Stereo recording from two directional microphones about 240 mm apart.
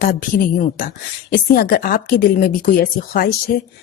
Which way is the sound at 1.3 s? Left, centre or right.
Left.